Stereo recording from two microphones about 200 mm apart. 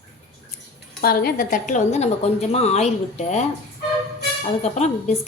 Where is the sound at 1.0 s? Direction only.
50° left (ahead or behind); by 3.4 s 35° left (ahead or behind).